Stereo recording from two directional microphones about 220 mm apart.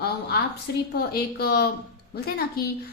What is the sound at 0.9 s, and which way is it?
A woman's voice, 45° left (ahead or behind).